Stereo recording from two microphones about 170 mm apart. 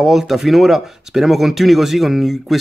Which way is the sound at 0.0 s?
Centre (ahead or behind).